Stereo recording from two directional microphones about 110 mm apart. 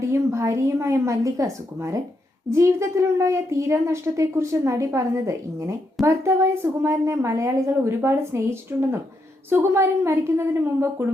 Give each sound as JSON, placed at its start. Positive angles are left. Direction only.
{"t": 0.1, "sound": "a woman's voice", "side_deg": -25}